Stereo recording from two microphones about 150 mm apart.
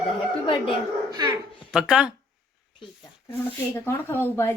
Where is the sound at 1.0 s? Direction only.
25° right (ahead or behind).